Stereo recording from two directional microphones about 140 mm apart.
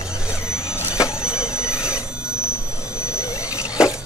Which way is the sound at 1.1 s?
5° right (ahead or behind).